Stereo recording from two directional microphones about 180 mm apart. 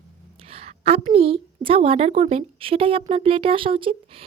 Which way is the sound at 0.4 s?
35° right (ahead or behind).